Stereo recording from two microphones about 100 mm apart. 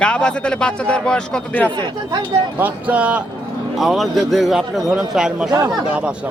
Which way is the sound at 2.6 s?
15° right (ahead or behind).